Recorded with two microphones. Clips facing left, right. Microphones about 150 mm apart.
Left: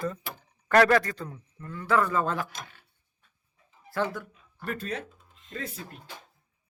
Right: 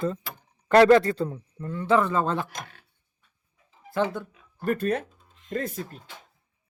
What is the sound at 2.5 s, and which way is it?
Speech, 50° right (ahead or behind).